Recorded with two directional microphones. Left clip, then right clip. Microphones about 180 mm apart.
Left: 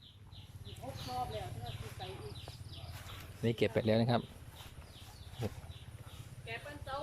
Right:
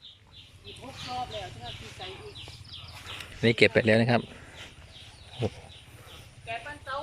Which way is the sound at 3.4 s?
10° right (ahead or behind).